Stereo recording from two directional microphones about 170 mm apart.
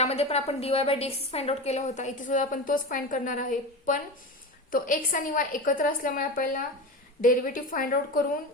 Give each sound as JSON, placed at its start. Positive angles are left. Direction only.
{"t": 0.0, "sound": "a woman's voice", "side_deg": 35}